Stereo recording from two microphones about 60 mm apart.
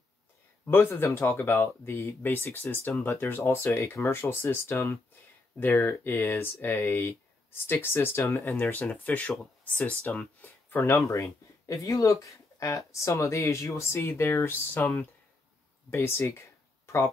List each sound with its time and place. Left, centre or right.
0.7 s speech: left
2.2 s speech: left
7.5 s speech: left
8.9 s speech: left
10.8 s speech: left